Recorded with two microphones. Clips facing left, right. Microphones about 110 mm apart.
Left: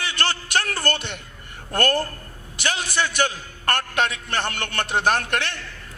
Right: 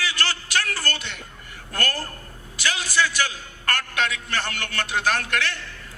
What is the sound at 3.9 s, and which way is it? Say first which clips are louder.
Speech: left 2 dB; 50° left (ahead or behind).